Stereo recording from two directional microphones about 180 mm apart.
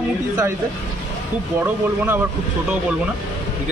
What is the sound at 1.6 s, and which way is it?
Speech, 10° right (ahead or behind).